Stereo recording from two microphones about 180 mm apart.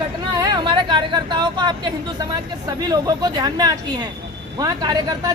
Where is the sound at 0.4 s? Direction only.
25° right (ahead or behind).